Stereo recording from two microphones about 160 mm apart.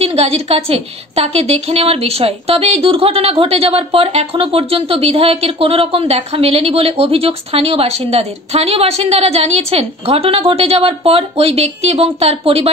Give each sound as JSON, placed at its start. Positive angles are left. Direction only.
{"t": 0.0, "sound": "a woman's voice", "side_deg": -40}